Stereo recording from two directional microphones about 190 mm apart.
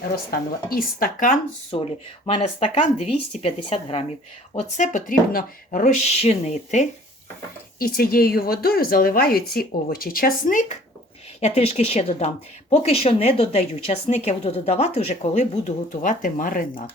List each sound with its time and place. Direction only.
0.3 s a woman's voice: 50° left (ahead or behind)
1.7 s a woman's voice: 30° left (ahead or behind)
7.8 s a woman's voice: 50° left (ahead or behind)